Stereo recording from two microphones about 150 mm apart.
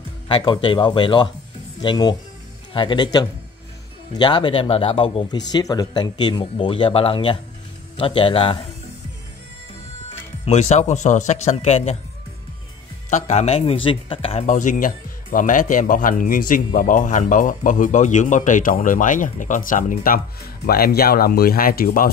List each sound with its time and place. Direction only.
0.3 s speech: 30° left (ahead or behind)
10.4 s speech: 45° left (ahead or behind)
13.1 s speech: 50° left (ahead or behind)
14.5 s speech: 60° left (ahead or behind)
20.6 s speech: 90° left